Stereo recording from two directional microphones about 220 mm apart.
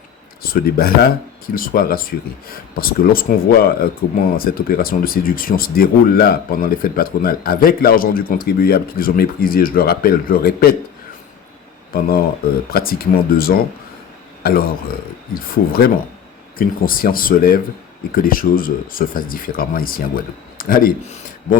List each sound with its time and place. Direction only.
0.4 s speech: 45° left (ahead or behind)
11.9 s speech: 45° left (ahead or behind)